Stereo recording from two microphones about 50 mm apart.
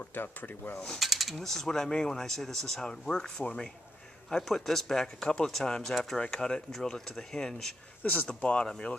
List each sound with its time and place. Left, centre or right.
0.1 s speech: left
0.8 s speech: centre
8.0 s speech: left
8.3 s speech: centre